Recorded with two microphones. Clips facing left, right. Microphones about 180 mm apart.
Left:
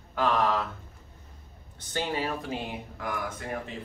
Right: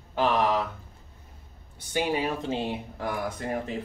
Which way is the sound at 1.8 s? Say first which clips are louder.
Right 4 dB; 10° right (ahead or behind).